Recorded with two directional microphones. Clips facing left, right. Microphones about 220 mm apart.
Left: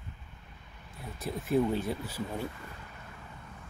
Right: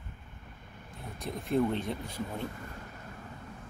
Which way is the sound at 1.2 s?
5° left (ahead or behind).